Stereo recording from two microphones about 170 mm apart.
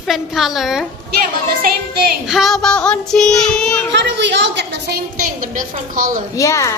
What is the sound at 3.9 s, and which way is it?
A woman's voice, 90° right.